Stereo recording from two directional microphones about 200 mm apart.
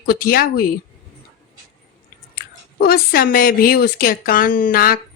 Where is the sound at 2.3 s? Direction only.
50° left (ahead or behind).